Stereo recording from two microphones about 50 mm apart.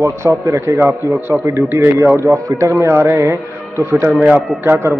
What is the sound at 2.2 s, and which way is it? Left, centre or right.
Speech, right.